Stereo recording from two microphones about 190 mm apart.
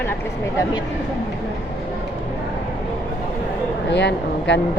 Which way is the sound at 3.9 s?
65° left (ahead or behind).